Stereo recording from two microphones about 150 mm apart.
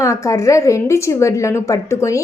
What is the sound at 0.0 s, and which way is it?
A woman's voice, 20° left (ahead or behind).